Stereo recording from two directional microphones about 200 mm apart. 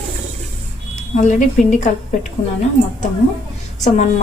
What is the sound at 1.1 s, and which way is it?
Speech, 40° left (ahead or behind).